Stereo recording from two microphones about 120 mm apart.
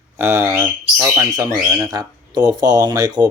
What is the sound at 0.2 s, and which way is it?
Speech, 20° right (ahead or behind).